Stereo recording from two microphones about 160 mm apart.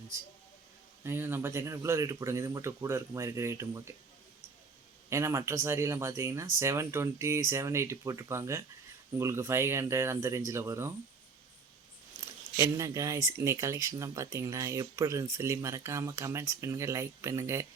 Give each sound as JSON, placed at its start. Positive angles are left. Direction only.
{"t": 1.0, "sound": "speech", "side_deg": -15}
{"t": 5.0, "sound": "speech", "side_deg": -15}
{"t": 12.5, "sound": "speech", "side_deg": -20}